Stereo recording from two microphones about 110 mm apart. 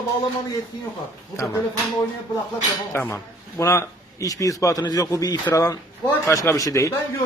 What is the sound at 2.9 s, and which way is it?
A man's voice, 20° left (ahead or behind).